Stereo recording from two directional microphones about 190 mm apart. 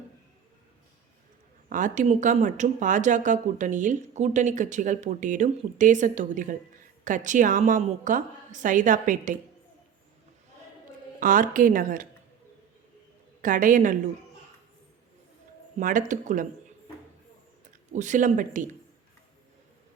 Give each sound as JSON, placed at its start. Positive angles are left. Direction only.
{"t": 1.7, "sound": "a woman's voice", "side_deg": -40}
{"t": 11.2, "sound": "a woman's voice", "side_deg": -45}
{"t": 13.4, "sound": "a woman's voice", "side_deg": -45}
{"t": 15.8, "sound": "a woman's voice", "side_deg": -45}
{"t": 17.9, "sound": "a woman's voice", "side_deg": -40}